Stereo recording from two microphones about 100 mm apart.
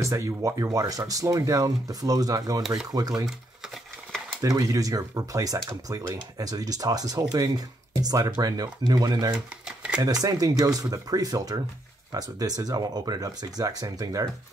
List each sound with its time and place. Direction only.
0.0 s speech: 30° right (ahead or behind)
4.4 s speech: 35° right (ahead or behind)